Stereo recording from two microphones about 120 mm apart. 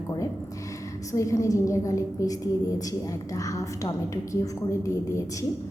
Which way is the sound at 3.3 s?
25° left (ahead or behind).